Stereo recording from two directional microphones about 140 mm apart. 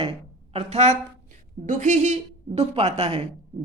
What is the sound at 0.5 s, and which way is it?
Speech, 50° right (ahead or behind).